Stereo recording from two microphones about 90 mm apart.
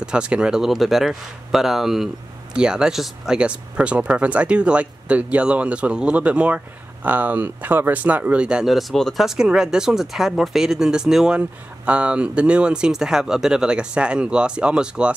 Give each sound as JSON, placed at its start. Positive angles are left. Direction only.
{"t": 0.0, "sound": "speech", "side_deg": -10}
{"t": 8.6, "sound": "speech", "side_deg": 0}